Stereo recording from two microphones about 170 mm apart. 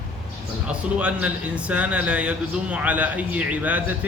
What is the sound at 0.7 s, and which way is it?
A man's voice, 5° right (ahead or behind).